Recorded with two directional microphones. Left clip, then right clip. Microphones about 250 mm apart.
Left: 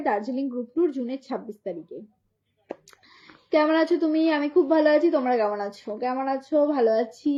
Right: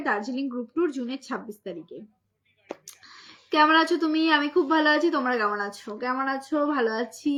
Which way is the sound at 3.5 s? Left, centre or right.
Centre.